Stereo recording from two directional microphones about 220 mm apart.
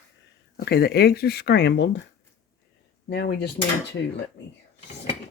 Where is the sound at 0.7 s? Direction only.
45° left (ahead or behind).